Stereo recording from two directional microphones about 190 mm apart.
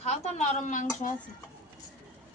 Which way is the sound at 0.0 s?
35° left (ahead or behind).